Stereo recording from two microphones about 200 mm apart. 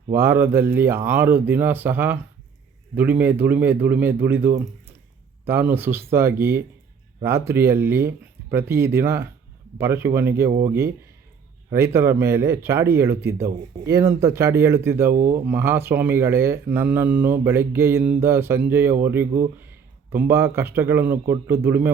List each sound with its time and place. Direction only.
0.2 s speech: 10° right (ahead or behind)
15.1 s speech: 40° right (ahead or behind)
15.4 s speech: 10° right (ahead or behind)